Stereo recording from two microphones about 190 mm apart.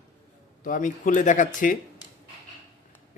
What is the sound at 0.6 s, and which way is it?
Speech, 45° left (ahead or behind).